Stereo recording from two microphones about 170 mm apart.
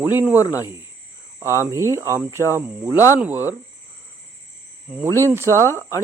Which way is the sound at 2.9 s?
20° left (ahead or behind).